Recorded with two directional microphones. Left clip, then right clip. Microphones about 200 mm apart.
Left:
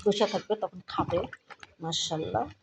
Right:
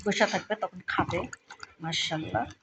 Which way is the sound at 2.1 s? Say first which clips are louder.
Left 1 dB; 10° right (ahead or behind).